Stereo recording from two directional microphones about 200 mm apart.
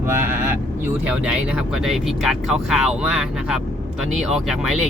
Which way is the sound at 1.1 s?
5° right (ahead or behind).